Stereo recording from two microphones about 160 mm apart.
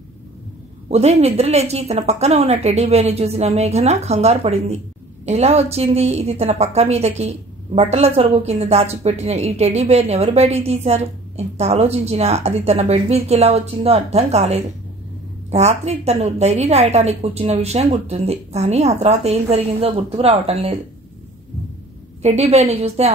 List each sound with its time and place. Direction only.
0.8 s speech: 40° right (ahead or behind)
22.2 s speech: 40° right (ahead or behind)